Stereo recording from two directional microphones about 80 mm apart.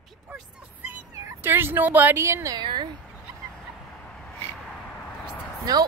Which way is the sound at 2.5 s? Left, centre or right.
Right.